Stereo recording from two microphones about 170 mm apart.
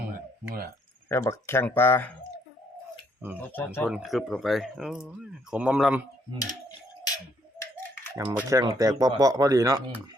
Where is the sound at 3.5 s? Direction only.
10° left (ahead or behind).